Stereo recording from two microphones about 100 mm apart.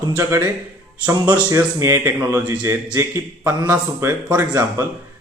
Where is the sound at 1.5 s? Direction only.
30° right (ahead or behind).